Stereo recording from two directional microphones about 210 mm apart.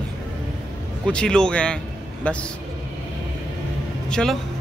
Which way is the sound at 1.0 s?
5° left (ahead or behind).